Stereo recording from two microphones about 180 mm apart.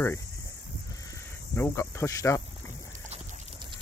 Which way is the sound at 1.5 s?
15° left (ahead or behind).